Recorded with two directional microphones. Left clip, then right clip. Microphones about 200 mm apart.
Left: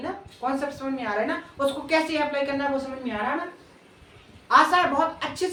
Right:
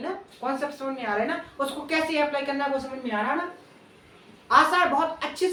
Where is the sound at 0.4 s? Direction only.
10° left (ahead or behind).